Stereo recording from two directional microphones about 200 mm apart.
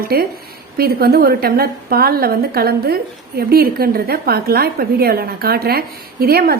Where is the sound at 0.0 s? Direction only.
50° right (ahead or behind).